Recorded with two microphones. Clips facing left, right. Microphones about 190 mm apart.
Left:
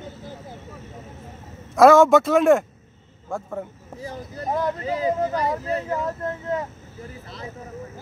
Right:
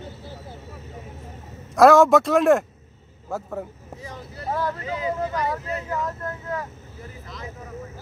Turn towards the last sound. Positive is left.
turn(degrees=25)  # may be behind; listen again after turning